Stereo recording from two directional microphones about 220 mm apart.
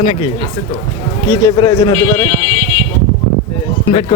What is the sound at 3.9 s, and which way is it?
Speech, 25° left (ahead or behind).